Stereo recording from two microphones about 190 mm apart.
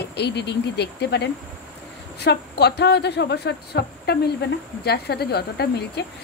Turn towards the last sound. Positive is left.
turn(degrees=55)  # may be behind; listen again after turning